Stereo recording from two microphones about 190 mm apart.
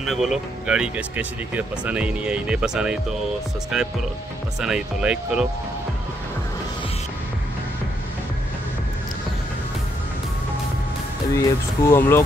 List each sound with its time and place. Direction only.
0.0 s speech: centre (ahead or behind)
11.3 s speech: 15° left (ahead or behind)